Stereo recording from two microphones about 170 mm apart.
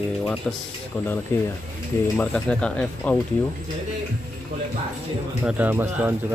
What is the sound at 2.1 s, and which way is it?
Speech, 10° left (ahead or behind).